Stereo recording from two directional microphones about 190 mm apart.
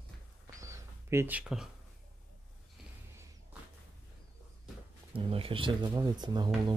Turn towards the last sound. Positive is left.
turn(degrees=-20)  # may be behind; listen again after turning